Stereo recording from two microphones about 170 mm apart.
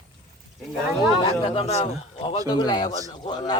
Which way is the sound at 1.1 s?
25° left (ahead or behind).